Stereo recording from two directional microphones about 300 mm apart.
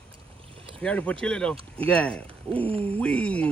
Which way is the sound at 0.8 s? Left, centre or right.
Centre.